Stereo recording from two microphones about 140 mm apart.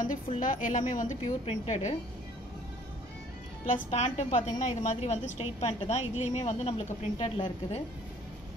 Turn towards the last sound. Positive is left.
turn(degrees=40)  # may be behind; listen again after turning